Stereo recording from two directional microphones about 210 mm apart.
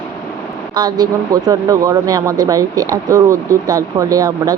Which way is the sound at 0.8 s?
20° right (ahead or behind).